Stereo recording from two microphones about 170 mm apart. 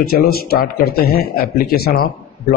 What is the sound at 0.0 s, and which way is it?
A man's voice, 65° left (ahead or behind).